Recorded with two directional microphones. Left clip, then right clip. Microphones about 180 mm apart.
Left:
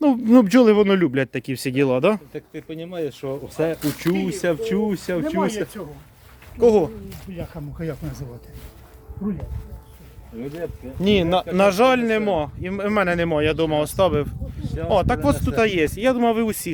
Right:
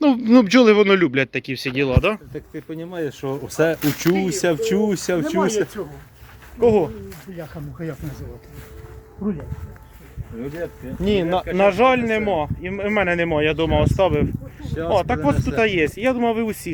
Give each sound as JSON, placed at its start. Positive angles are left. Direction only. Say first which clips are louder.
{"t": 0.0, "sound": "speech", "louder": "right 1 dB", "side_deg": 25}
{"t": 1.2, "sound": "speech", "louder": "right 2 dB", "side_deg": 40}
{"t": 2.3, "sound": "speech", "louder": "right 1 dB", "side_deg": 0}
{"t": 2.9, "sound": "speech", "louder": "right 1 dB", "side_deg": -20}
{"t": 3.5, "sound": "speech", "louder": "right 5 dB", "side_deg": -50}
{"t": 6.6, "sound": "speech", "louder": "even", "side_deg": 35}
{"t": 7.8, "sound": "speech", "louder": "left 1 dB", "side_deg": 70}
{"t": 10.4, "sound": "speech", "louder": "right 1 dB", "side_deg": 0}
{"t": 11.0, "sound": "speech", "louder": "left 1 dB", "side_deg": 35}
{"t": 14.6, "sound": "speech", "louder": "right 3 dB", "side_deg": -30}
{"t": 14.8, "sound": "speech", "louder": "even", "side_deg": 30}